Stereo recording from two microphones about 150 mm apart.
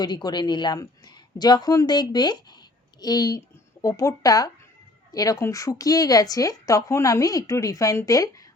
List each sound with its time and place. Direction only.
0.0 s a woman's voice: 30° left (ahead or behind)